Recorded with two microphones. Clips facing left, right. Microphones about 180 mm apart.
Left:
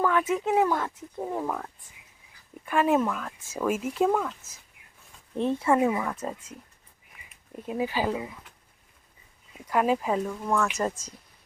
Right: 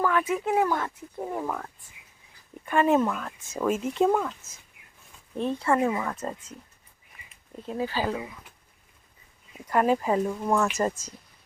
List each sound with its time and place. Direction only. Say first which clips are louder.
0.0 s speech: left 1 dB; centre (ahead or behind)
5.4 s speech: left 2 dB; 20° left (ahead or behind)
5.7 s speech: even; 5° left (ahead or behind)
9.6 s speech: right 1 dB; centre (ahead or behind)
10.2 s speech: right 2 dB; 20° right (ahead or behind)
10.8 s speech: right 2 dB; 5° right (ahead or behind)